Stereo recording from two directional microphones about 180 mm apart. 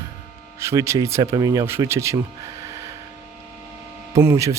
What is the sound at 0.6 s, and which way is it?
Speech, 15° right (ahead or behind).